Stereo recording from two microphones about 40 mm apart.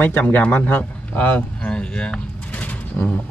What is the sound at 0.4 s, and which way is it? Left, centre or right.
A man's voice, left.